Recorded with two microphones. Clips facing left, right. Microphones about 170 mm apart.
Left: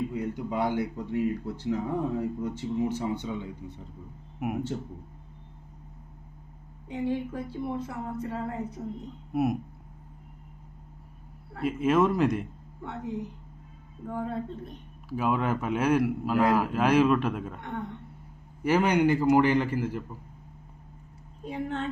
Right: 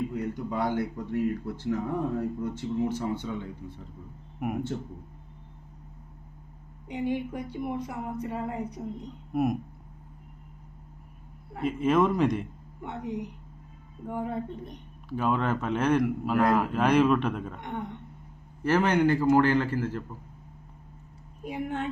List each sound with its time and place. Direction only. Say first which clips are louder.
0.1 s speech: even; 15° left (ahead or behind)
4.4 s speech: even; 5° left (ahead or behind)
6.8 s speech: even; 15° right (ahead or behind)
9.3 s speech: even; 5° left (ahead or behind)
11.6 s a man's voice: even; 5° left (ahead or behind)
12.8 s speech: even; 15° right (ahead or behind)
15.1 s a man's voice: even; 5° left (ahead or behind)
17.6 s speech: even; 20° right (ahead or behind)
18.6 s speech: even; 15° left (ahead or behind)
21.4 s speech: even; 10° right (ahead or behind)